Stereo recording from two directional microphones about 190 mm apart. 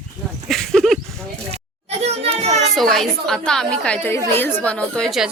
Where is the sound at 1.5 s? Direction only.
35° right (ahead or behind).